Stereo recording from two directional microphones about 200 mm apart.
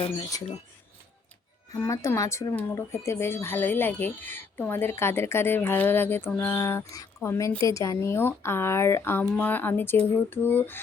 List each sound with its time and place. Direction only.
0.0 s speech: 20° left (ahead or behind)
1.7 s speech: 15° left (ahead or behind)